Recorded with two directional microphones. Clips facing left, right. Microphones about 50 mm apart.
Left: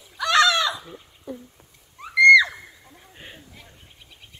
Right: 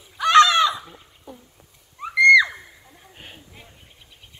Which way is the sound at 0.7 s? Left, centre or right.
Centre.